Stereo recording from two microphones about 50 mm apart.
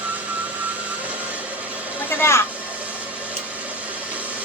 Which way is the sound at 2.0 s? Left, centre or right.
Left.